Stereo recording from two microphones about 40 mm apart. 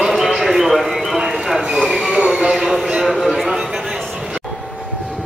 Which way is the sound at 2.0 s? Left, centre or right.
Right.